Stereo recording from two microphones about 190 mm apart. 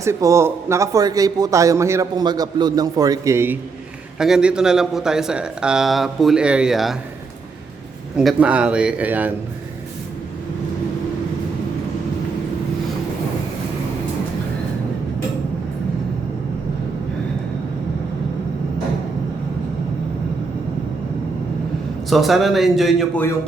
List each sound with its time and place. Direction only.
0.0 s a man's voice: 15° right (ahead or behind)
8.1 s speech: centre (ahead or behind)
22.1 s speech: centre (ahead or behind)